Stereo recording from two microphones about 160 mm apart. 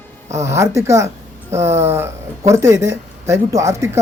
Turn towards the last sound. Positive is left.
turn(degrees=-20)  # may be behind; listen again after turning